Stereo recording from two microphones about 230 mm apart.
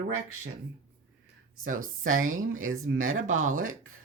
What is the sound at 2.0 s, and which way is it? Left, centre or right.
Speech, right.